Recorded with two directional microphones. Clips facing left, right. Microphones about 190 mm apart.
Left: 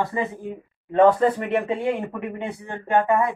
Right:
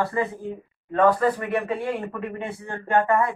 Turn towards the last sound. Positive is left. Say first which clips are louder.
# left 1 dB
turn(degrees=15)  # may be behind; listen again after turning